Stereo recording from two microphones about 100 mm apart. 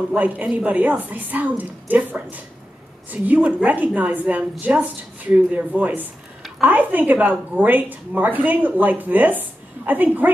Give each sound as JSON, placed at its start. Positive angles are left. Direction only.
{"t": 0.1, "sound": "a woman's voice", "side_deg": -15}